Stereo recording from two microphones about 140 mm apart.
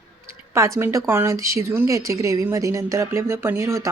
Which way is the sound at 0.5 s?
20° right (ahead or behind).